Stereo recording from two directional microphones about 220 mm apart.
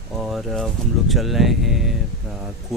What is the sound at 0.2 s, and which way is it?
Speech, centre (ahead or behind).